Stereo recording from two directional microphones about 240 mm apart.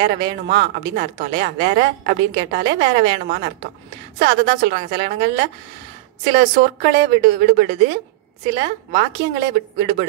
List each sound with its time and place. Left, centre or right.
0.0 s a woman's voice: right